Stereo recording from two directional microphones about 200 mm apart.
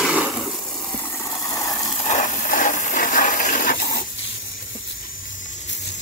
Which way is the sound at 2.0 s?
40° left (ahead or behind).